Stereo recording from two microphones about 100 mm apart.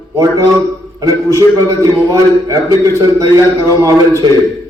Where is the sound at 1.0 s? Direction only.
30° right (ahead or behind).